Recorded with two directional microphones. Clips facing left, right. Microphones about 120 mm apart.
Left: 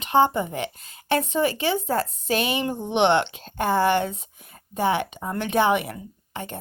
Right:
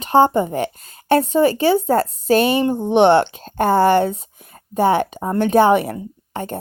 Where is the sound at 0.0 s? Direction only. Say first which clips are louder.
Right 6 dB; 40° right (ahead or behind).